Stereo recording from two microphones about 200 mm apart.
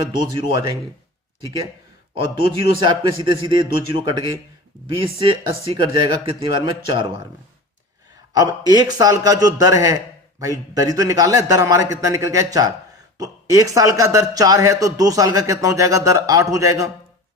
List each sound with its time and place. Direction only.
0.2 s speech: 25° right (ahead or behind)
2.8 s speech: 25° right (ahead or behind)
8.3 s a man's voice: 20° right (ahead or behind)